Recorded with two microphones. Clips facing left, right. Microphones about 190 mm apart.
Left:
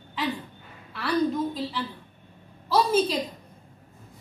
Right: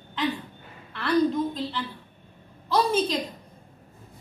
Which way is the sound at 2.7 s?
5° left (ahead or behind).